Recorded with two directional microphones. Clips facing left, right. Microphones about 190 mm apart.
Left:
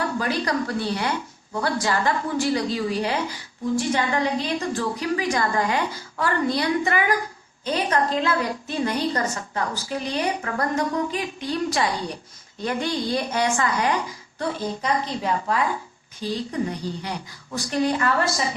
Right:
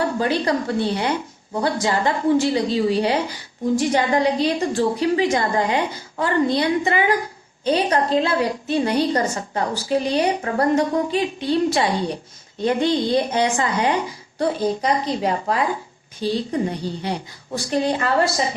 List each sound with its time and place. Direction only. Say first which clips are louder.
0.0 s a woman's voice: right 4 dB; 25° right (ahead or behind)
14.3 s a woman's voice: right 6 dB; 35° right (ahead or behind)